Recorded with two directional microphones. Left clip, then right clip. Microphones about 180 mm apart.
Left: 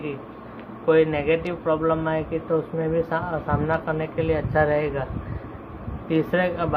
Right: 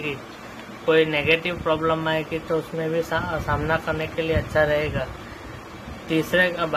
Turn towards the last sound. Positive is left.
turn(degrees=-5)  # may be behind; listen again after turning